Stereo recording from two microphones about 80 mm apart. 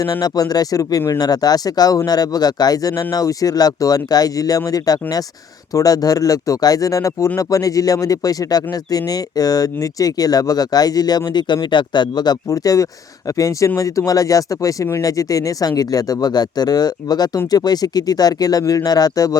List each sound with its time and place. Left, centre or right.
0.0 s speech: left
11.3 s speech: left